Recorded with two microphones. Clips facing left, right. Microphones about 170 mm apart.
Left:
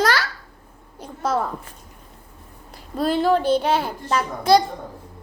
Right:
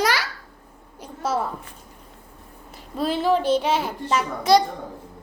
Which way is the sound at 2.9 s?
Centre (ahead or behind).